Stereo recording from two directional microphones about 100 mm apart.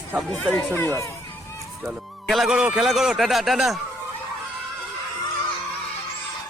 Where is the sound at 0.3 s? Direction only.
10° left (ahead or behind).